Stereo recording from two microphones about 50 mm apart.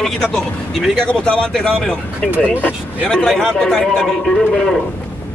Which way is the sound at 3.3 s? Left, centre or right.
Centre.